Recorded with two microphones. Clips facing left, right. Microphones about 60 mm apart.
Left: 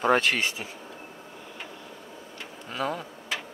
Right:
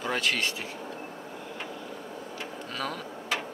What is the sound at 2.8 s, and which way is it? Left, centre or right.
Speech, centre.